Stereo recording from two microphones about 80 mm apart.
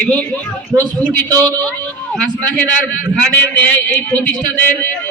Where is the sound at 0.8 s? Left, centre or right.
Right.